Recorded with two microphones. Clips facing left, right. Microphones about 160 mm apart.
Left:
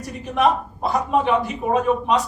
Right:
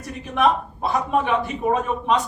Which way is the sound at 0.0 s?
40° left (ahead or behind).